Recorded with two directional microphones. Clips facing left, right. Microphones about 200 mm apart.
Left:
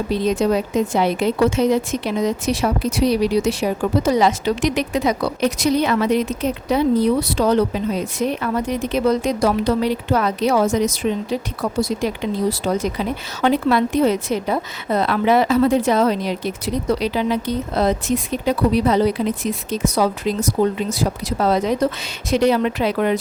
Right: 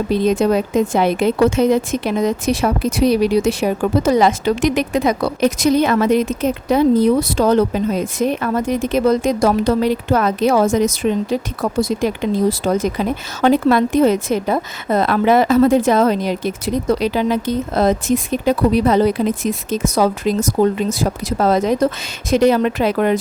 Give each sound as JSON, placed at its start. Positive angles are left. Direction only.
{"t": 0.1, "sound": "a woman's voice", "side_deg": -55}